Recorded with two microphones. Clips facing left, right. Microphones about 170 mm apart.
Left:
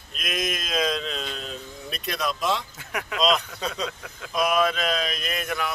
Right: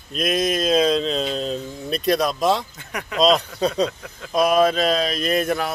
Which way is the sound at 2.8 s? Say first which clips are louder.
Right 1 dB; 5° left (ahead or behind).